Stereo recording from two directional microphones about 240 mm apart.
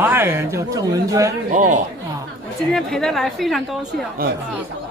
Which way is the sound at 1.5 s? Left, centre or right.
Right.